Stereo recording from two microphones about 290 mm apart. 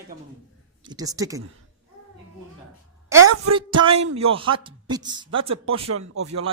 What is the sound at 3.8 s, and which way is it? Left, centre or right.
A man's voice, centre.